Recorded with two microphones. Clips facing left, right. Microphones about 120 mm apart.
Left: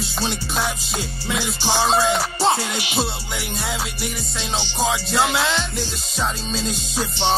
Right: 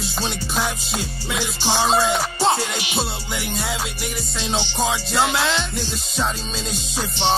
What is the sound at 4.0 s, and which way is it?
Music, 10° left (ahead or behind).